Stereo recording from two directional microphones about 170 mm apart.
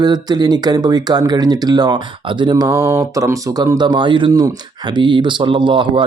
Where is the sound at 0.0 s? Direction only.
25° right (ahead or behind).